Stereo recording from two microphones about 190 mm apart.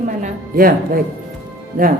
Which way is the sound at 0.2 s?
50° right (ahead or behind).